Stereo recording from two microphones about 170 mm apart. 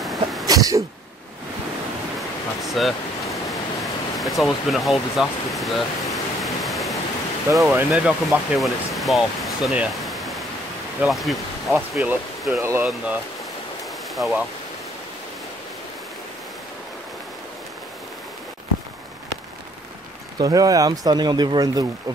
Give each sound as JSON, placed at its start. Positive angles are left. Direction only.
{"t": 0.0, "sound": "sneeze", "side_deg": 0}
{"t": 0.5, "sound": "sneeze", "side_deg": -20}
{"t": 2.1, "sound": "a sound", "side_deg": 0}
{"t": 7.5, "sound": "speech", "side_deg": -5}
{"t": 11.0, "sound": "insect", "side_deg": 0}
{"t": 11.9, "sound": "speech", "side_deg": -10}
{"t": 14.1, "sound": "speech", "side_deg": 0}
{"t": 20.3, "sound": "speech", "side_deg": -20}